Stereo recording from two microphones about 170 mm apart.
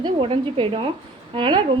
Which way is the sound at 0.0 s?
30° right (ahead or behind).